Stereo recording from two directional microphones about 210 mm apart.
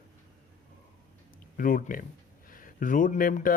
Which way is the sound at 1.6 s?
40° left (ahead or behind).